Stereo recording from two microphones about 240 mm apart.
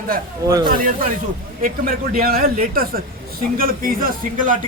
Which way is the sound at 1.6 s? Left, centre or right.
Right.